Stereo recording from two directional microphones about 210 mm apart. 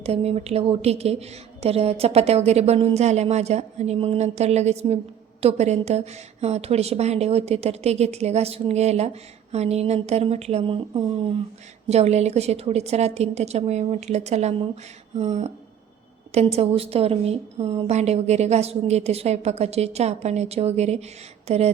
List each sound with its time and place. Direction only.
0.0 s a woman's voice: 30° right (ahead or behind)